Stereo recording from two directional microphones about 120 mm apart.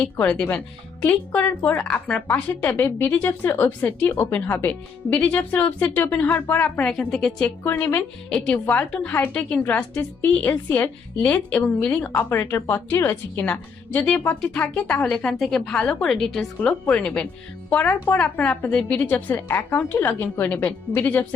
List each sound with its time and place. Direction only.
0.2 s a woman's voice: 10° left (ahead or behind)
7.0 s a woman's voice: 5° left (ahead or behind)
7.6 s speech: 20° left (ahead or behind)
8.3 s a woman's voice: 5° left (ahead or behind)